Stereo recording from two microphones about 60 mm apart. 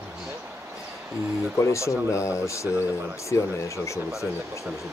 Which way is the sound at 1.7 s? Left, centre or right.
Left.